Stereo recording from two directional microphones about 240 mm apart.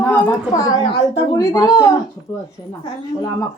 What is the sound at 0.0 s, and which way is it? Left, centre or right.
Speech, centre.